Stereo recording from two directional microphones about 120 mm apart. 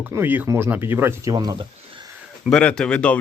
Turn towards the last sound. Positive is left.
turn(degrees=10)  # may be behind; listen again after turning